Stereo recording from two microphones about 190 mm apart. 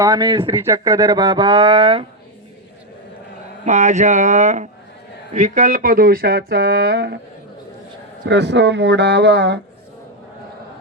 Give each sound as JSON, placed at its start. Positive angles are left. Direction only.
{"t": 0.0, "sound": "speech", "side_deg": -20}
{"t": 0.5, "sound": "speech", "side_deg": -15}
{"t": 3.6, "sound": "speech", "side_deg": -40}
{"t": 8.3, "sound": "speech", "side_deg": -65}